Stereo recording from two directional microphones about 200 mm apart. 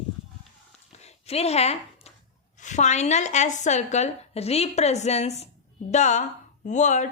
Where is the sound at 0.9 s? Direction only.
30° left (ahead or behind).